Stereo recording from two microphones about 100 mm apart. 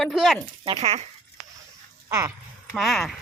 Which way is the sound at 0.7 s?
90° right.